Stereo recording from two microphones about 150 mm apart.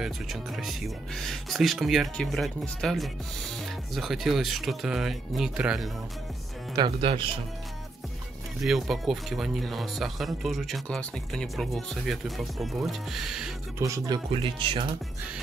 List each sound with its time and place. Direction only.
0.0 s speech: centre (ahead or behind)
6.7 s speech: 30° right (ahead or behind)
8.5 s speech: centre (ahead or behind)
13.7 s speech: 20° right (ahead or behind)